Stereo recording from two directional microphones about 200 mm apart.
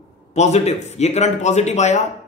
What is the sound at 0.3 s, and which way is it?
Speech, 35° left (ahead or behind).